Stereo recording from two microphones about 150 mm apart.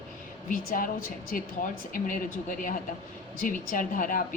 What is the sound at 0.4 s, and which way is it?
Speech, 65° left (ahead or behind).